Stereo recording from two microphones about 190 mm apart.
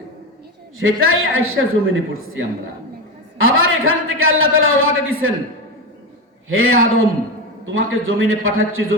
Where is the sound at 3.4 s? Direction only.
90° right.